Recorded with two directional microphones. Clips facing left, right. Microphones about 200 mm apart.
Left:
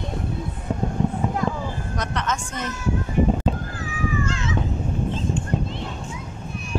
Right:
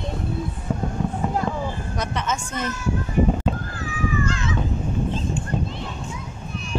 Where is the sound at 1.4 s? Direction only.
35° right (ahead or behind).